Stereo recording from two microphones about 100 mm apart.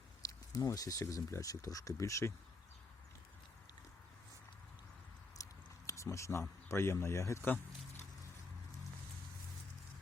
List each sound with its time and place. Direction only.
0.3 s speech: 35° left (ahead or behind)
5.4 s a sound: 30° left (ahead or behind)
6.7 s speech: 25° left (ahead or behind)